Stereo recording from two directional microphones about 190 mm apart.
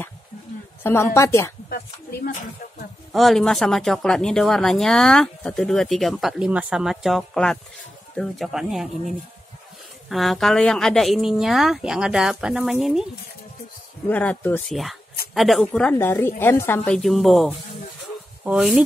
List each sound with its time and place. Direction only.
0.8 s a woman's voice: 15° left (ahead or behind)
1.7 s speech: 50° left (ahead or behind)
3.1 s speech: centre (ahead or behind)
14.0 s a woman's voice: 10° left (ahead or behind)